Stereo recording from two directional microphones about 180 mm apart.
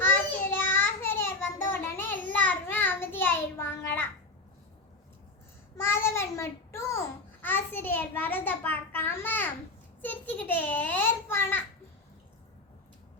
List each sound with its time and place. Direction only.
0.0 s child singing: 15° left (ahead or behind)
5.7 s child singing: 15° left (ahead or behind)
7.4 s a sound: 10° left (ahead or behind)